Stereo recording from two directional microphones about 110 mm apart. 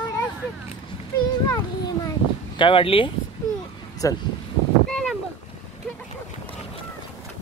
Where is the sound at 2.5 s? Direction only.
50° left (ahead or behind).